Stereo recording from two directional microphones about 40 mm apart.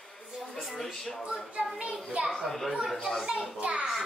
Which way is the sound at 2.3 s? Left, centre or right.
Centre.